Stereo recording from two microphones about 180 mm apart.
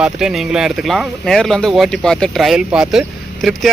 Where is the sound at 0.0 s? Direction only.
5° right (ahead or behind).